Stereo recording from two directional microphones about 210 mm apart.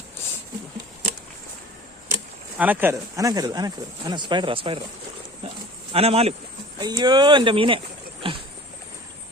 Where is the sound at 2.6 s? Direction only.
10° right (ahead or behind); by 4.8 s 25° right (ahead or behind).